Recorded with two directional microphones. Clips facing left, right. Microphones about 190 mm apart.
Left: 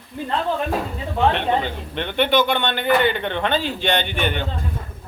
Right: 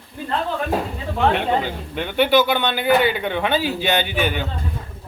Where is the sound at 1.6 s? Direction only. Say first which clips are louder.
Right 1 dB; 5° right (ahead or behind).